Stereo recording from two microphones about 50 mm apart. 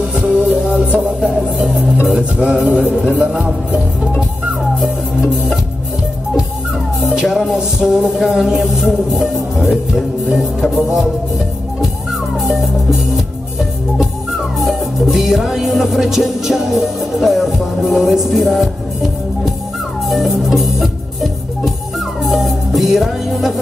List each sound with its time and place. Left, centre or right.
0.1 s music: centre
7.0 s music: centre
8.5 s speech: centre
9.1 s music: centre
10.6 s speech: centre
14.7 s music: centre